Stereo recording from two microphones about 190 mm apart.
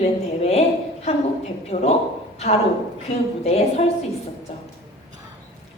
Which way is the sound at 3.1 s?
35° left (ahead or behind).